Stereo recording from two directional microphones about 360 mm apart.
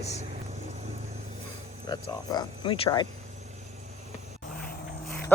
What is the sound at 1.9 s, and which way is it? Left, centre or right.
Speech, centre.